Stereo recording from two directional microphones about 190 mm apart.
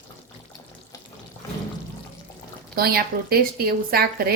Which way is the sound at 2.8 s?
55° right (ahead or behind).